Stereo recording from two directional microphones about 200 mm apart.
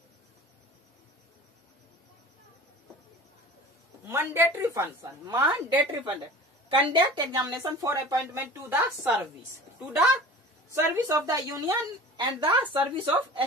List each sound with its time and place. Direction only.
4.0 s speech: 10° right (ahead or behind)
6.7 s speech: 25° right (ahead or behind); by 9.3 s 10° right (ahead or behind)
10.7 s speech: 15° right (ahead or behind)